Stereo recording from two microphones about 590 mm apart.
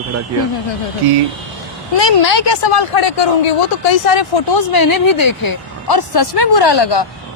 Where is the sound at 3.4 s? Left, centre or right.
Left.